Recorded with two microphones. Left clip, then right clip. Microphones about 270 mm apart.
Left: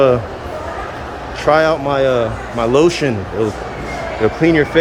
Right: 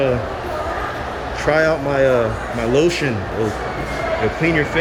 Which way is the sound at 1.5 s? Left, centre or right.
Centre.